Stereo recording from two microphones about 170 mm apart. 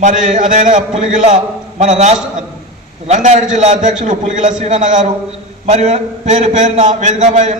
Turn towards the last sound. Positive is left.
turn(degrees=-45)  # may be behind; listen again after turning